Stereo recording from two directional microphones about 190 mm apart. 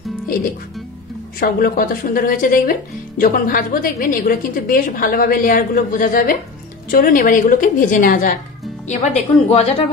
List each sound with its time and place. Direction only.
1.4 s a woman's voice: 50° left (ahead or behind); by 9.8 s 30° left (ahead or behind)